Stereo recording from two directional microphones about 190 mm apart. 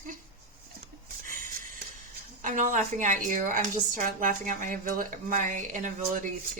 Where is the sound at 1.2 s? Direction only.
45° right (ahead or behind).